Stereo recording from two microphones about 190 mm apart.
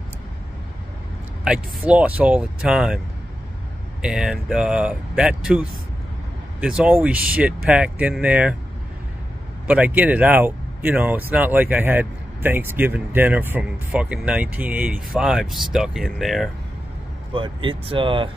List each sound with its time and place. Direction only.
1.4 s speech: 5° right (ahead or behind)
4.0 s speech: 5° right (ahead or behind)
9.7 s speech: 10° right (ahead or behind)
17.3 s speech: 25° right (ahead or behind)